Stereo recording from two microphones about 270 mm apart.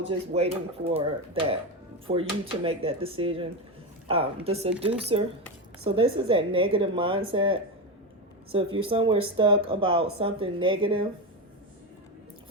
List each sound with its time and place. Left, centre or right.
0.0 s speech: right